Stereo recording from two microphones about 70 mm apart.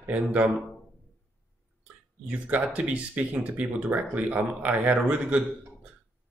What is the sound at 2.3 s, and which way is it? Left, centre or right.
Speech, right.